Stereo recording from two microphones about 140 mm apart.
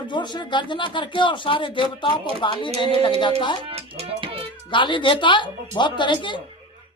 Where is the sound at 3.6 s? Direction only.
40° right (ahead or behind).